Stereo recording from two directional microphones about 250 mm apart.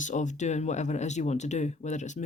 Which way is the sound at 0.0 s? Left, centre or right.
Left.